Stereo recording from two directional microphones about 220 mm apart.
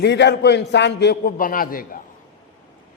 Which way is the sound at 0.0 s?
50° left (ahead or behind).